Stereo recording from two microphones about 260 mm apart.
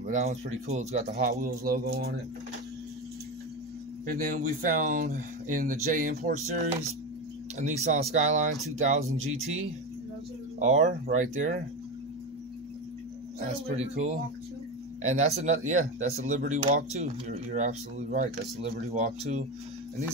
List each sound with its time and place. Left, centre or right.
0.0 s speech: right
1.4 s speech: right
4.0 s speech: right
10.6 s speech: right
13.5 s speech: right